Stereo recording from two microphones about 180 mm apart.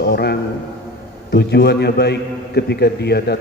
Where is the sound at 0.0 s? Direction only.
65° left (ahead or behind).